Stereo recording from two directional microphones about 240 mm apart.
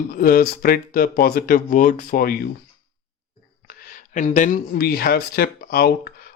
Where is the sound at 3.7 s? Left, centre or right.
Left.